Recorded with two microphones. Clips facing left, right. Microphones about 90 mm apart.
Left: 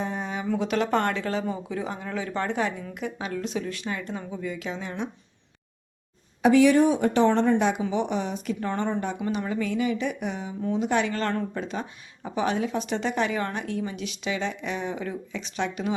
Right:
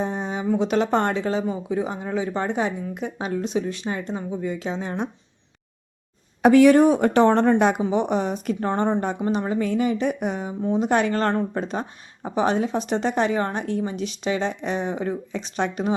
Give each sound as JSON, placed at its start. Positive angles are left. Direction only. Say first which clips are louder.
{"t": 0.0, "sound": "a sound", "louder": "right 4 dB", "side_deg": -25}
{"t": 0.4, "sound": "speech", "louder": "right 5 dB", "side_deg": -20}
{"t": 6.4, "sound": "a woman's voice", "louder": "right 4 dB", "side_deg": -50}
{"t": 7.8, "sound": "speech", "louder": "right 4 dB", "side_deg": -40}